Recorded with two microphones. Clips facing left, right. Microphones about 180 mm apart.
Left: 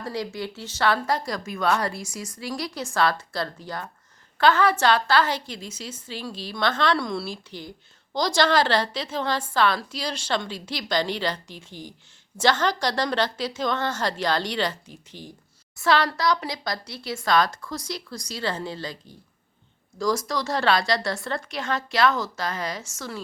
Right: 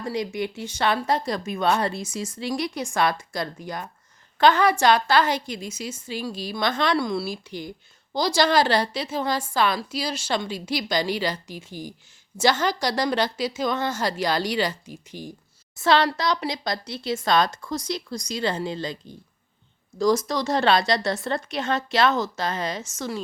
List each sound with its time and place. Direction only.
0.0 s a woman's voice: 20° right (ahead or behind)
7.0 s a woman's voice: centre (ahead or behind)
15.7 s a woman's voice: 20° right (ahead or behind)
20.0 s a woman's voice: 20° right (ahead or behind)